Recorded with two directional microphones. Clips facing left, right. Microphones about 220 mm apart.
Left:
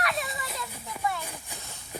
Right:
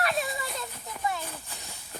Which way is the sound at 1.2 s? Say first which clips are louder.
Even; 15° left (ahead or behind).